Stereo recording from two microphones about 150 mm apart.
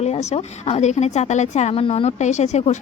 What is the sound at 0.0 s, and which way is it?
A woman's voice, 45° left (ahead or behind).